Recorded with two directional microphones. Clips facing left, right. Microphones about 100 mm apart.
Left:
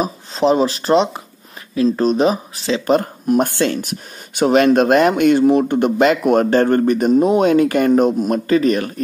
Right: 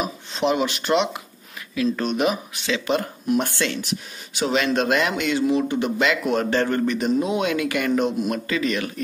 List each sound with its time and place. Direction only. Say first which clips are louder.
0.0 s speech: left 6 dB; 35° left (ahead or behind)